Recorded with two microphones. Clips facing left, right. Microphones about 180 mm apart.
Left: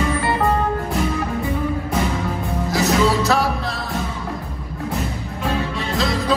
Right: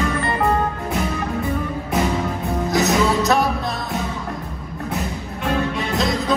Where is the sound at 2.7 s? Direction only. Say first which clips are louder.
Left 1 dB; 20° right (ahead or behind).